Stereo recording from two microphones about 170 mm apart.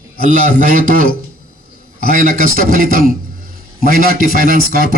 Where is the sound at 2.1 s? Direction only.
55° right (ahead or behind).